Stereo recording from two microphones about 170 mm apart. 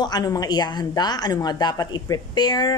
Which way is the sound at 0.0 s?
20° left (ahead or behind).